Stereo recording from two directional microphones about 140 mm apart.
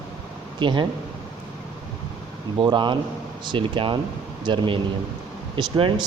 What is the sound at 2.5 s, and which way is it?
Speech, 35° right (ahead or behind).